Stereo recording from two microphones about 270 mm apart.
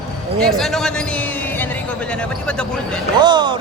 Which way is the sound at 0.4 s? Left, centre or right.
Centre.